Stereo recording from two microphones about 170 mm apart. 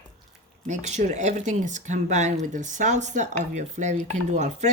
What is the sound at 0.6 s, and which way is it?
Speech, 45° right (ahead or behind).